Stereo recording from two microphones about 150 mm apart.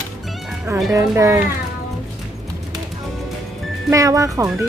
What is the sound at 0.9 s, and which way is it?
Speech, 20° right (ahead or behind).